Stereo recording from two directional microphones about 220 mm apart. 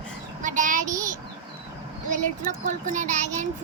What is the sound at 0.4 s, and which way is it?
Child singing, 35° right (ahead or behind).